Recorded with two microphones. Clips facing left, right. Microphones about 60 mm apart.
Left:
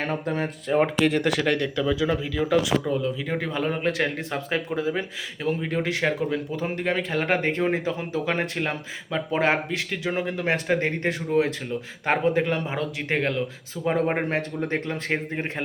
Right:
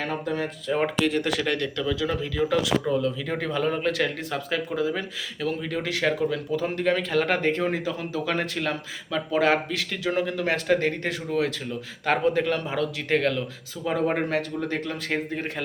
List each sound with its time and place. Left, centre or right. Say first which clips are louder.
0.0 s speech: left 1 dB; left
1.4 s speech: left 3 dB; centre
13.8 s speech: left 1 dB; left